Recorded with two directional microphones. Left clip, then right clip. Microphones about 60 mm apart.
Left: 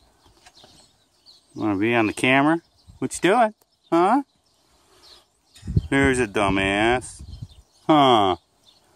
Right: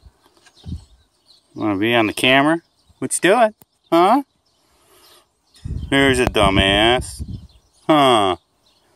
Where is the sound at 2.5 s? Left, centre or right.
Centre.